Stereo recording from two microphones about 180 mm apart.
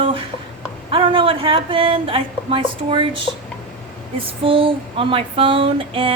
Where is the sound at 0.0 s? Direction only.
30° right (ahead or behind).